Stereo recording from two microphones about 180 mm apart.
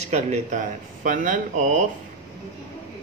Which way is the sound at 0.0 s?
40° right (ahead or behind).